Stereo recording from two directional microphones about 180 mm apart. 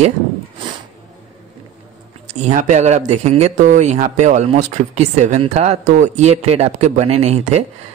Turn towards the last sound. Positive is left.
turn(degrees=-35)  # may be behind; listen again after turning